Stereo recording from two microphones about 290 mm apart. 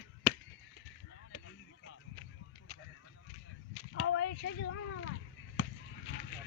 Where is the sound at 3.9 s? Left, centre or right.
Left.